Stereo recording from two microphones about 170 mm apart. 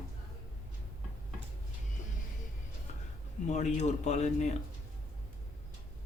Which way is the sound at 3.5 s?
40° left (ahead or behind).